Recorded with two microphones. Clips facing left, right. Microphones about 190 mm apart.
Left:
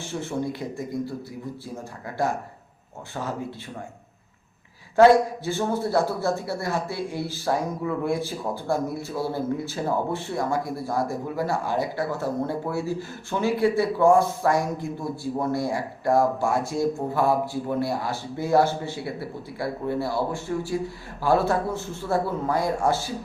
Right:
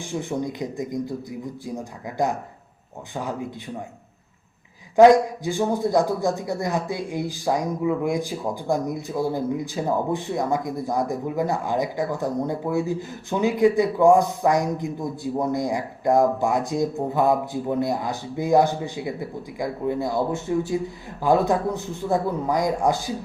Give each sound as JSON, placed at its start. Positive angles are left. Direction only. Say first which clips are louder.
{"t": 0.0, "sound": "a man's voice", "louder": "right 2 dB", "side_deg": -15}
{"t": 4.9, "sound": "a man's voice", "louder": "right 2 dB", "side_deg": -15}